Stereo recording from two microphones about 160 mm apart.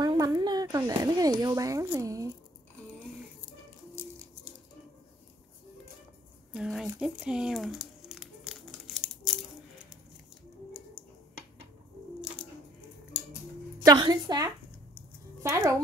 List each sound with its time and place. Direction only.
0.0 s a sound: 25° right (ahead or behind)
1.4 s a woman's voice: 20° right (ahead or behind)
6.5 s crumpling: centre (ahead or behind)
13.8 s a woman's voice: 25° right (ahead or behind)
15.4 s music: 20° right (ahead or behind)